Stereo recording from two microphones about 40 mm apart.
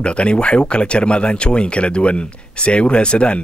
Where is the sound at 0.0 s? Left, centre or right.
Left.